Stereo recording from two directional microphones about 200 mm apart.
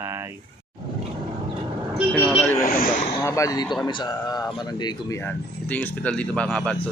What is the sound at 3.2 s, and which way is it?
Speech, 15° left (ahead or behind).